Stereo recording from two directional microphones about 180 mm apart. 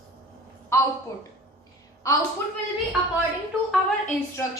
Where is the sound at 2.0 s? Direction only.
20° left (ahead or behind).